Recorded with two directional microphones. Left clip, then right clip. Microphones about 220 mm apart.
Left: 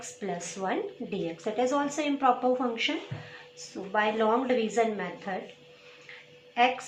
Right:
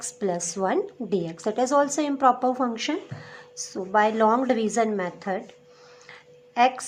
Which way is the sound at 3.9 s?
50° right (ahead or behind).